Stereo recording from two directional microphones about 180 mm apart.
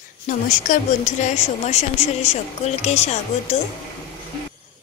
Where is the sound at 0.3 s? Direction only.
45° left (ahead or behind).